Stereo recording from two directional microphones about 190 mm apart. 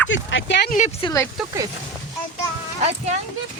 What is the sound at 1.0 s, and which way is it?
Speech, 15° left (ahead or behind).